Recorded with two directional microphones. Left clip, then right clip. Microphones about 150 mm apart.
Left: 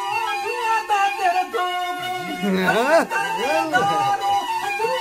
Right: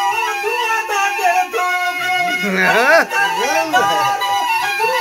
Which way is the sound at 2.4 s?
15° left (ahead or behind).